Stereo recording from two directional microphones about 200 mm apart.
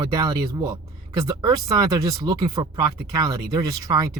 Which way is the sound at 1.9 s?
15° right (ahead or behind).